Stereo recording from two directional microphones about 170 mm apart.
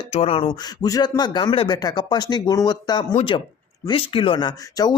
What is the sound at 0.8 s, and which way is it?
Speech, 25° left (ahead or behind).